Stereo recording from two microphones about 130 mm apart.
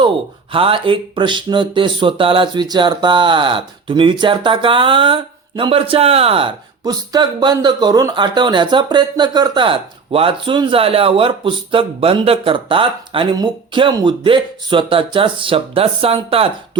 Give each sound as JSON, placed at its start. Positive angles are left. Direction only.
{"t": 0.5, "sound": "speech", "side_deg": -45}
{"t": 6.8, "sound": "speech", "side_deg": -30}